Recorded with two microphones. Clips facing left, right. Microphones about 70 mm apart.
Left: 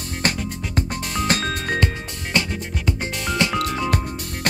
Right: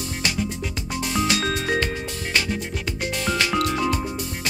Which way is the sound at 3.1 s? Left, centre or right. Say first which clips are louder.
Right 1 dB; centre.